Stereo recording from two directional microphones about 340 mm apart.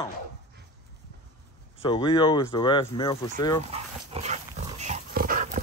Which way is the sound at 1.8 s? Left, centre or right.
Centre.